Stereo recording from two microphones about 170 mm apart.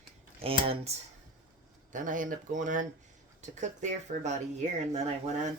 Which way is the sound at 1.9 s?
50° right (ahead or behind).